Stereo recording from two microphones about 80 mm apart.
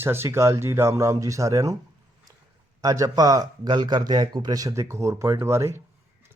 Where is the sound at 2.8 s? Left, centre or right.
Right.